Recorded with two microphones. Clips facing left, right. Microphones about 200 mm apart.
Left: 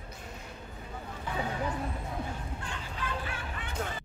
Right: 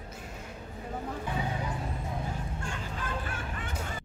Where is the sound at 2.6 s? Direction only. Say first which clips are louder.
Right 1 dB; 45° right (ahead or behind).